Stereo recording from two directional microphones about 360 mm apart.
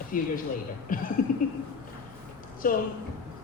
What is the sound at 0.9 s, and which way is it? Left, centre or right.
Speech, left.